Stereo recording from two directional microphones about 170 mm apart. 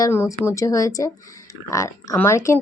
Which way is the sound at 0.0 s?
15° left (ahead or behind).